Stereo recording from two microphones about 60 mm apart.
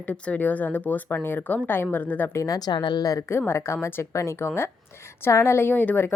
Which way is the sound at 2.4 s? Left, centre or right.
Left.